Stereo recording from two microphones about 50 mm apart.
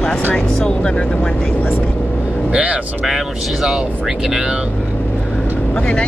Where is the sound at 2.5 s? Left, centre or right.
Right.